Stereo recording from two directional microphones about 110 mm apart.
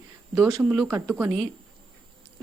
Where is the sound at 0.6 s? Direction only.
5° right (ahead or behind).